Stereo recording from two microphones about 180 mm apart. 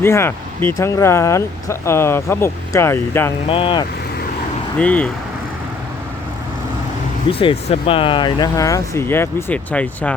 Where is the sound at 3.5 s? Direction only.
30° left (ahead or behind).